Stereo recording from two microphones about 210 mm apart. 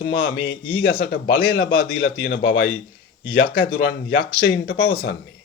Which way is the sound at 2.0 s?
60° left (ahead or behind).